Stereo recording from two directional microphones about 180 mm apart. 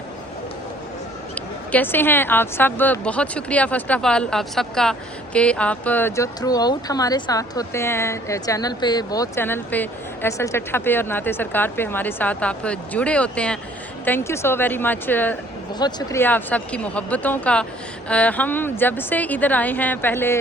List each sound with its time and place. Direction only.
1.4 s speech: 10° left (ahead or behind)
15.8 s speech: 25° left (ahead or behind)
16.2 s speech: 10° left (ahead or behind)